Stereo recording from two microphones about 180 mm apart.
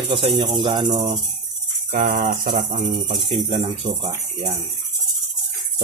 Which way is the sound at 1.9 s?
45° right (ahead or behind).